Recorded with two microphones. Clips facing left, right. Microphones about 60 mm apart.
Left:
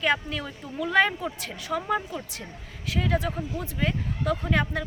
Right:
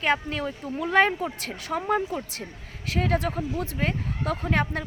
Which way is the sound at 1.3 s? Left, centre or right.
Right.